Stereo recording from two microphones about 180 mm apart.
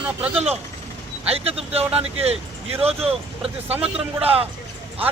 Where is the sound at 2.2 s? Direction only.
35° right (ahead or behind).